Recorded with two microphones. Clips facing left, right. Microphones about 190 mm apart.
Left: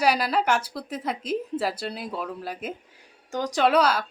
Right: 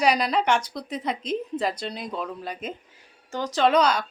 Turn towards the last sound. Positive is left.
turn(degrees=5)  # may be behind; listen again after turning